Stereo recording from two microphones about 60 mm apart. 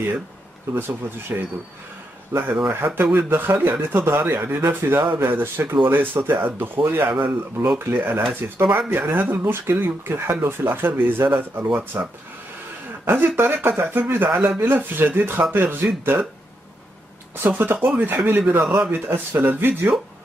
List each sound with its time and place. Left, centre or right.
1.3 s speech: right
2.3 s speech: right
4.8 s speech: right
17.4 s speech: right
18.5 s speech: right